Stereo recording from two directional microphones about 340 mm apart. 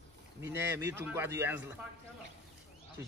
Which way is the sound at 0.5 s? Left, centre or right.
Centre.